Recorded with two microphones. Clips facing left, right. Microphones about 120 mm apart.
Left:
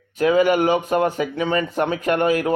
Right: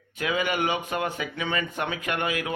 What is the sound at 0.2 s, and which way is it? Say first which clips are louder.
A man's voice: left 10 dB; 40° left (ahead or behind).